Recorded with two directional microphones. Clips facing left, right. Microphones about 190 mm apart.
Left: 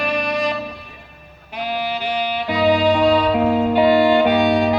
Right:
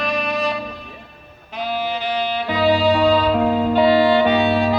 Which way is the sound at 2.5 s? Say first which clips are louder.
Left 1 dB; 10° left (ahead or behind).